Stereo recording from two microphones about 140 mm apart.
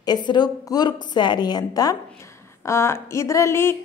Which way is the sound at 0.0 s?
30° left (ahead or behind).